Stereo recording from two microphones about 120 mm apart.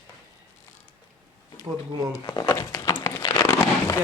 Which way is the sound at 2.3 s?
35° left (ahead or behind).